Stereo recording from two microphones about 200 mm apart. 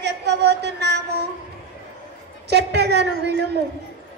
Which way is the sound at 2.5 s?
55° right (ahead or behind).